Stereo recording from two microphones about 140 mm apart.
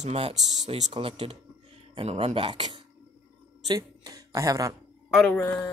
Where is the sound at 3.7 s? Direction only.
25° right (ahead or behind).